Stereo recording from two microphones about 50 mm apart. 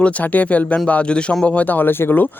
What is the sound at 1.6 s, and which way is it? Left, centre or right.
Speech, left.